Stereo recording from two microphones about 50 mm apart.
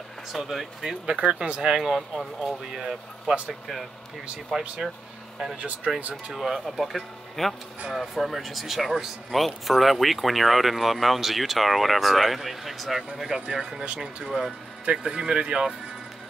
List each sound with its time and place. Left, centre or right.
0.3 s speech: centre
1.8 s speech: centre
4.5 s speech: centre
5.9 s speech: right
6.3 s speech: centre
14.9 s speech: centre